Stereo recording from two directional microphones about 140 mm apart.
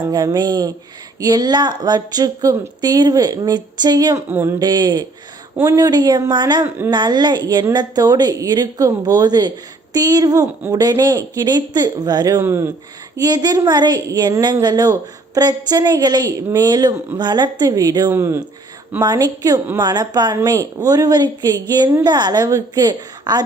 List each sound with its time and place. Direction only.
0.1 s speech: 30° right (ahead or behind)
4.6 s speech: 30° right (ahead or behind)
12.4 s speech: 15° right (ahead or behind)
13.1 s speech: 30° right (ahead or behind)
19.0 s speech: 30° right (ahead or behind)